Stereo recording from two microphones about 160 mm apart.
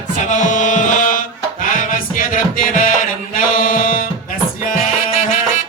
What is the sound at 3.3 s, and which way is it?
Mantra, 60° left (ahead or behind).